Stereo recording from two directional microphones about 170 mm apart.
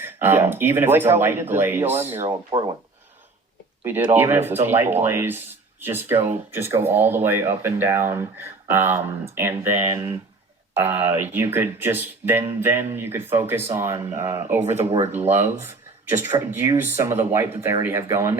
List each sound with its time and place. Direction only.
0.0 s speech: 15° right (ahead or behind)
2.2 s speech: 25° right (ahead or behind)
4.1 s speech: 15° right (ahead or behind)